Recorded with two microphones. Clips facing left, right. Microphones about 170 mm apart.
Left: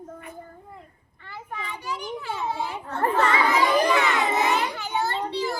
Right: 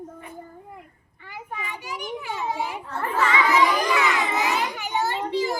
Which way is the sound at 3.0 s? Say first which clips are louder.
Left 2 dB; 40° left (ahead or behind).